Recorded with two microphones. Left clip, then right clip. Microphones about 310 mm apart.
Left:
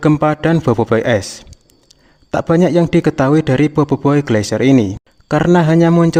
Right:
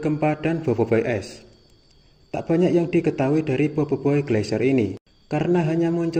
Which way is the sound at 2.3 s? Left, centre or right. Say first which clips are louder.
Left 7 dB; left.